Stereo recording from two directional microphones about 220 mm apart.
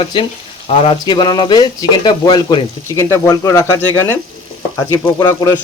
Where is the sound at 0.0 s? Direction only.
25° left (ahead or behind).